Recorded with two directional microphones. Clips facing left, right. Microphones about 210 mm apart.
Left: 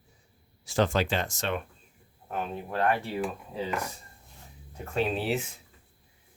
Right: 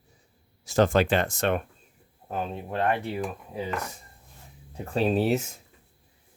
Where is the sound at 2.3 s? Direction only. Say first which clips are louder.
Right 2 dB; 25° right (ahead or behind).